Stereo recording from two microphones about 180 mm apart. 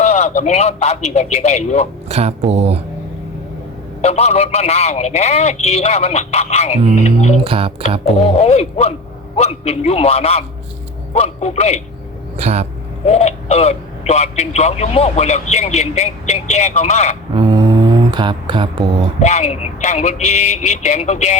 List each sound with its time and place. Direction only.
0.0 s a man's voice: 40° left (ahead or behind)
2.0 s speech: 35° right (ahead or behind)
4.0 s a man's voice: 35° left (ahead or behind)
7.4 s speech: 30° right (ahead or behind)
8.4 s a man's voice: 35° left (ahead or behind)
12.4 s speech: 35° right (ahead or behind)
13.1 s a man's voice: 35° left (ahead or behind)
17.3 s a sound: 25° right (ahead or behind)
19.2 s a man's voice: 40° left (ahead or behind)